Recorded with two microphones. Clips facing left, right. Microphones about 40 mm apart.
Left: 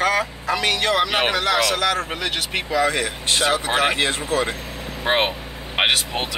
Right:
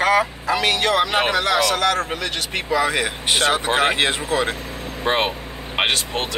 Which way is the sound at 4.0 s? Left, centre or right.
Right.